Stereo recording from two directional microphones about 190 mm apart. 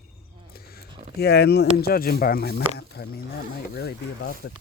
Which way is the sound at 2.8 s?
60° left (ahead or behind).